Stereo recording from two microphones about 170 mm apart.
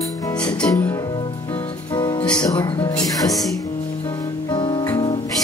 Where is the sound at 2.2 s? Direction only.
5° left (ahead or behind).